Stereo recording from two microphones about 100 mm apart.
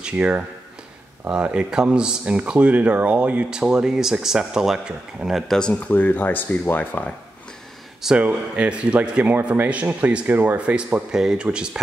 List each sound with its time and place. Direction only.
0.0 s speech: 10° right (ahead or behind)
5.6 s speech: 15° left (ahead or behind)
8.0 s speech: 5° right (ahead or behind)